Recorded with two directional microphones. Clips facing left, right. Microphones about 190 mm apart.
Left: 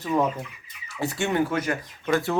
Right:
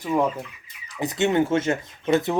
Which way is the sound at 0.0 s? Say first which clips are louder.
Right 1 dB; 10° right (ahead or behind).